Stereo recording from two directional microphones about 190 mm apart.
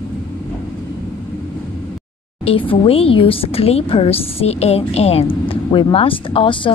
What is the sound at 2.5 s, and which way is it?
Speech, 30° left (ahead or behind).